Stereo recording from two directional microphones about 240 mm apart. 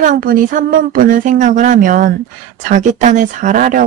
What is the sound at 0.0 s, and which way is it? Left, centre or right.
Speech, right.